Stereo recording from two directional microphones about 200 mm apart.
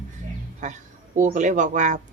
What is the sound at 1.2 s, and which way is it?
Speech, 40° right (ahead or behind).